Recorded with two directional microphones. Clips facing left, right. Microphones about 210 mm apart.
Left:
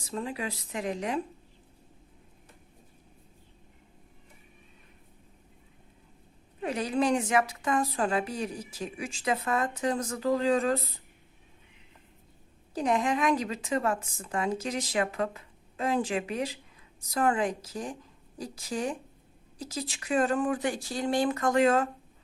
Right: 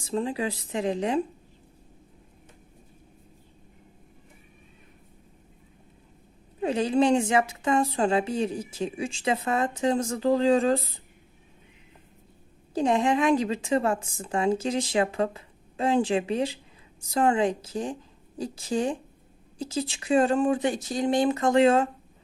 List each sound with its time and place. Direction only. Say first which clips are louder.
0.0 s a woman's voice: right 6 dB; 30° right (ahead or behind)
6.6 s a woman's voice: right 5 dB; 25° right (ahead or behind)
12.7 s a woman's voice: right 4 dB; 30° right (ahead or behind)